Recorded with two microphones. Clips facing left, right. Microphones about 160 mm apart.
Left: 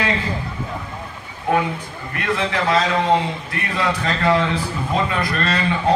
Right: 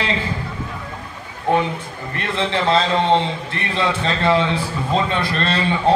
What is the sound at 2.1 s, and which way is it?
A man's voice, 30° right (ahead or behind).